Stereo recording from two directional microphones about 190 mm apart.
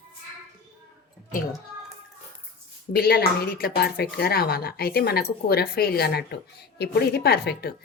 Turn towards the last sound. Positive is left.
turn(degrees=55)  # may be behind; listen again after turning